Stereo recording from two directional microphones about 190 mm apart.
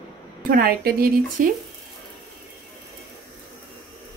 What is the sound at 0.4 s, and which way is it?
A woman's voice, 50° right (ahead or behind).